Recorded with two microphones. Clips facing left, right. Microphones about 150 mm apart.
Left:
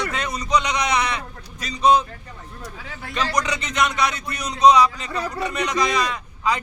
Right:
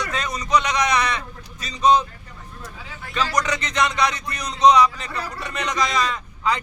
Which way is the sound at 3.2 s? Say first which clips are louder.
Right 1 dB; 10° left (ahead or behind).